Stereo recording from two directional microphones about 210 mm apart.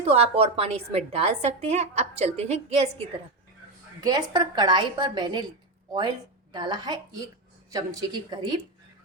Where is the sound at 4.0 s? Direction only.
20° right (ahead or behind).